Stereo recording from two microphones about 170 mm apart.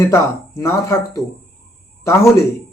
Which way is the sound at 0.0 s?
15° left (ahead or behind).